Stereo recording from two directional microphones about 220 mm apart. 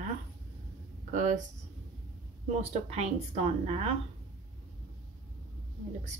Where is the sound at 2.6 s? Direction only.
30° right (ahead or behind).